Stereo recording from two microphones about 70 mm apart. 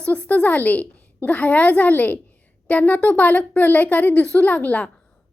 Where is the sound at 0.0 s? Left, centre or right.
Centre.